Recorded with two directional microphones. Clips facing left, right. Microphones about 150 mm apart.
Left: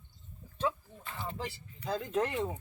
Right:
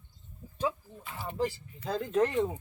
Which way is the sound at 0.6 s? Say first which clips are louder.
Right 1 dB; 10° right (ahead or behind).